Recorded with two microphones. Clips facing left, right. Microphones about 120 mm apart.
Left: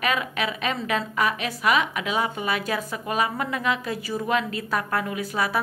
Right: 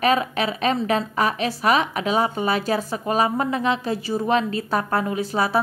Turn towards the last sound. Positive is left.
turn(degrees=-30)  # may be behind; listen again after turning